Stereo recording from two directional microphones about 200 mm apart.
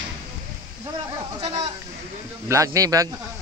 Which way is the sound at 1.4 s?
30° right (ahead or behind).